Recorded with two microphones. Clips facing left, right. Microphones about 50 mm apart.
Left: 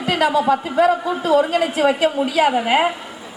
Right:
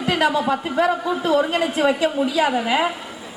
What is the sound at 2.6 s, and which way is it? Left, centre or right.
Speech, left.